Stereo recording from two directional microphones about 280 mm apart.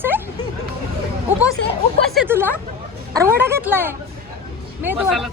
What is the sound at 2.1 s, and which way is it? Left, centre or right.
Speech, centre.